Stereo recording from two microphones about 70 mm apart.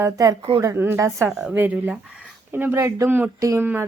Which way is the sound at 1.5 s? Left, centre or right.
Right.